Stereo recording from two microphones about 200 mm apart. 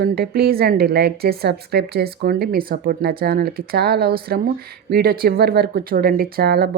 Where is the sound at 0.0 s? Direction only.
50° right (ahead or behind).